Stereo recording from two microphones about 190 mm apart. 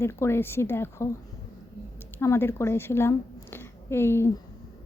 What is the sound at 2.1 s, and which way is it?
A woman's voice, 10° left (ahead or behind).